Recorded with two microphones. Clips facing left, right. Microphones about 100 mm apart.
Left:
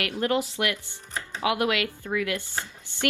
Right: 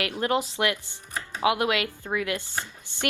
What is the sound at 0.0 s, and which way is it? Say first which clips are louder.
A woman's voice: even; 20° right (ahead or behind).